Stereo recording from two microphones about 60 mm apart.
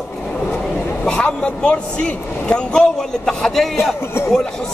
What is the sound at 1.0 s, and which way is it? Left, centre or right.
A man's voice, centre.